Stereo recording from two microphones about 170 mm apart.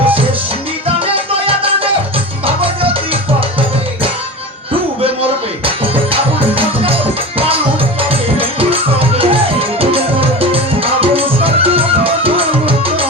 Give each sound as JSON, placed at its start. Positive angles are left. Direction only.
{"t": 1.0, "sound": "music", "side_deg": -35}
{"t": 4.7, "sound": "music", "side_deg": -35}
{"t": 7.3, "sound": "music", "side_deg": -35}